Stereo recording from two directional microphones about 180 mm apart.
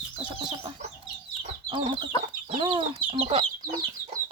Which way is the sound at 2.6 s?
30° right (ahead or behind).